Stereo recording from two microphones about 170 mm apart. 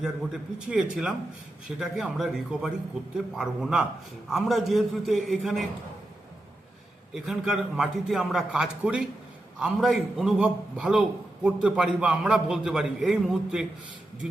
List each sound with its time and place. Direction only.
0.7 s a man's voice: 5° right (ahead or behind)
7.1 s a man's voice: 5° right (ahead or behind)